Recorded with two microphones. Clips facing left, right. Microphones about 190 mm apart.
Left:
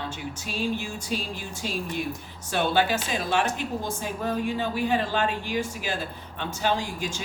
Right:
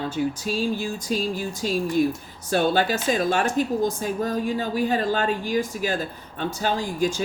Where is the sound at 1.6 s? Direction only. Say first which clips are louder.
Right 9 dB; 40° right (ahead or behind).